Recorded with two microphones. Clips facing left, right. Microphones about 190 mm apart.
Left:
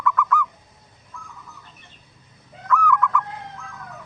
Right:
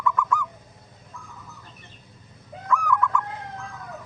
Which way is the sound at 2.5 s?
55° right (ahead or behind).